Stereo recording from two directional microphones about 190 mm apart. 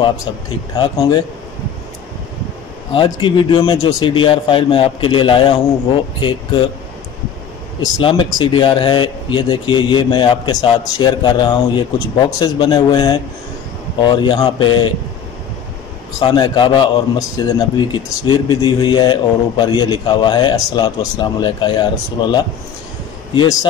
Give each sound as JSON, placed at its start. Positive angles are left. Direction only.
{"t": 0.7, "sound": "a man's voice", "side_deg": 25}
{"t": 2.9, "sound": "a man's voice", "side_deg": 25}
{"t": 7.8, "sound": "a man's voice", "side_deg": 25}
{"t": 16.2, "sound": "a man's voice", "side_deg": 25}